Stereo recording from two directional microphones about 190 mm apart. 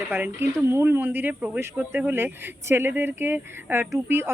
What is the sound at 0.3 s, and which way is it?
Speech, 10° right (ahead or behind).